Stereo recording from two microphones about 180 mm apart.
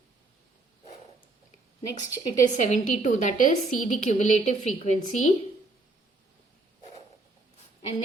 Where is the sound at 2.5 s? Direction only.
40° left (ahead or behind).